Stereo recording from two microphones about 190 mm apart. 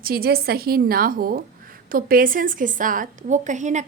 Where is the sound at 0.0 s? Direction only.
55° right (ahead or behind).